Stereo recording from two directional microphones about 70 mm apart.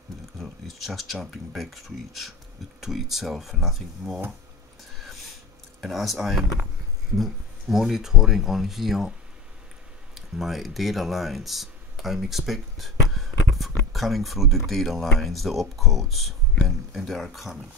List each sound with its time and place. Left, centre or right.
0.4 s speech: centre
4.9 s a sound: centre
5.8 s speech: centre
10.1 s speech: centre